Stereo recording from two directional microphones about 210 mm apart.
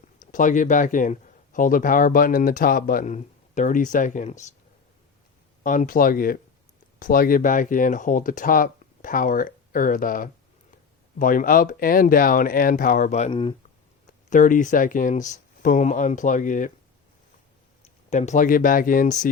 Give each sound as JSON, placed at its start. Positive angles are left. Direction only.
{"t": 0.2, "sound": "speech", "side_deg": 40}
{"t": 5.6, "sound": "speech", "side_deg": 40}
{"t": 14.3, "sound": "speech", "side_deg": 40}
{"t": 18.1, "sound": "speech", "side_deg": 35}